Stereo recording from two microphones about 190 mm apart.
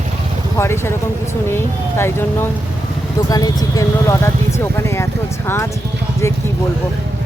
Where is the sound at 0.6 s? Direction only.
15° left (ahead or behind).